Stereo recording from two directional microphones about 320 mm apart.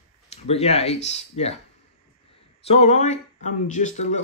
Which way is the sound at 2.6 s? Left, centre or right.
Centre.